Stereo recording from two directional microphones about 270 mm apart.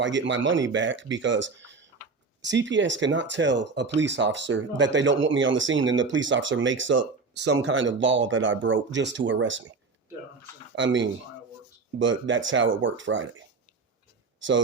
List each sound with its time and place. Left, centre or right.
0.0 s speech: right
10.8 s speech: right